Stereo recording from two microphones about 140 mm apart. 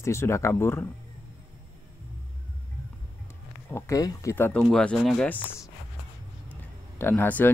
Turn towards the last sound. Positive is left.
turn(degrees=10)  # may be behind; listen again after turning